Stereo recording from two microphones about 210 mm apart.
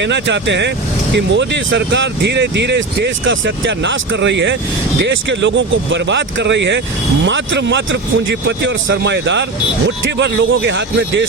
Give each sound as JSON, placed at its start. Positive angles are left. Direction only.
{"t": 0.0, "sound": "speech", "side_deg": -55}